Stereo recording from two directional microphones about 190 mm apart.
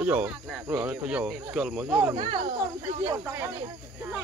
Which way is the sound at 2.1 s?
25° right (ahead or behind).